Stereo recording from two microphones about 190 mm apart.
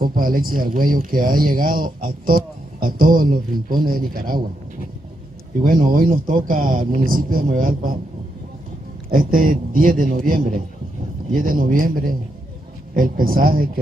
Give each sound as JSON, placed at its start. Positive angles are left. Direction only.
{"t": 0.0, "sound": "speech", "side_deg": -50}
{"t": 5.6, "sound": "speech", "side_deg": -45}
{"t": 9.1, "sound": "speech", "side_deg": -45}